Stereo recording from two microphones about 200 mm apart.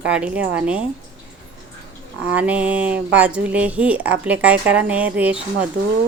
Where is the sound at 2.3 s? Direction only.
5° right (ahead or behind).